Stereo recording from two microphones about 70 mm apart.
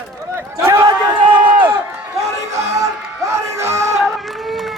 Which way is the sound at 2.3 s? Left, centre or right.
Right.